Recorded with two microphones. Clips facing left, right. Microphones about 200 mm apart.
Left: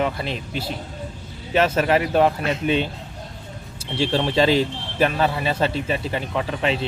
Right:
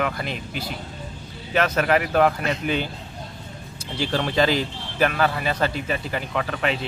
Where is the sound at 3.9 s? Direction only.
25° left (ahead or behind).